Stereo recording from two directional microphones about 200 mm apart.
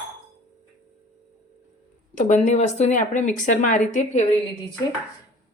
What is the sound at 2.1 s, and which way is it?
A woman's voice, 35° left (ahead or behind).